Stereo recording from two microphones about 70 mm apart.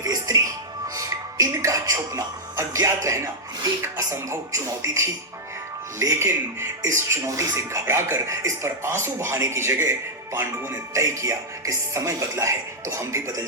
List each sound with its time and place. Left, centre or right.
0.0 s music: right
3.9 s speech: right
10.9 s speech: right